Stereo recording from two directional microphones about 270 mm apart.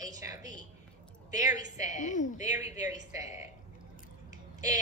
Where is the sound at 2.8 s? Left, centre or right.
Centre.